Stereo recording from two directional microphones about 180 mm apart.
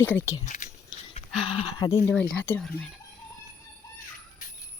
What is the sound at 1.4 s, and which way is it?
Speech, 30° left (ahead or behind).